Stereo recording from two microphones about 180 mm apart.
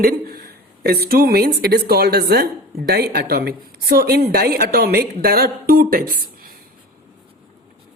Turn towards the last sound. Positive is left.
turn(degrees=-55)  # may be behind; listen again after turning